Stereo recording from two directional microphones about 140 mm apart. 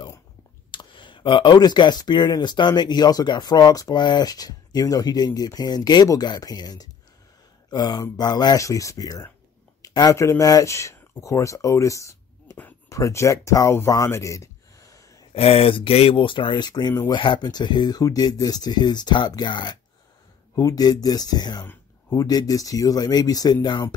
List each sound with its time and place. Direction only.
0.7 s speech: 35° left (ahead or behind)
15.3 s speech: 45° left (ahead or behind)